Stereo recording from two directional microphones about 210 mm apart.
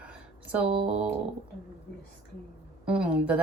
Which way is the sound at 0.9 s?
35° right (ahead or behind).